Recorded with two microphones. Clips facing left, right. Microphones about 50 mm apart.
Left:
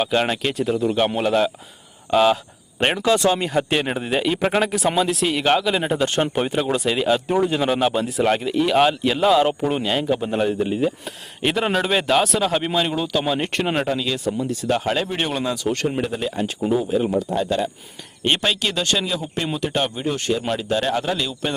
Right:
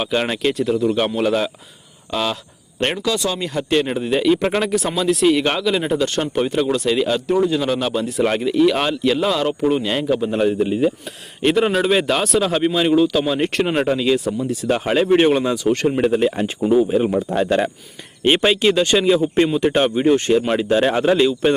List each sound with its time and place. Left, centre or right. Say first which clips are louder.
0.0 s a man's voice: right 1 dB; centre
2.0 s speech: left 6 dB; centre
3.2 s speech: left 2 dB; left
3.8 s a man's voice: right 3 dB; centre
8.1 s a man's voice: right 1 dB; centre
13.9 s speech: right 6 dB; centre
14.3 s a man's voice: right 2 dB; centre
16.0 s speech: right 7 dB; right
16.7 s speech: right 5 dB; centre; by 17.7 s right
18.2 s speech: right 5 dB; centre